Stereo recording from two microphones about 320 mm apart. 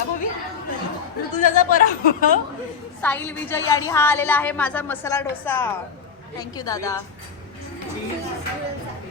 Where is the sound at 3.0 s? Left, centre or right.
Centre.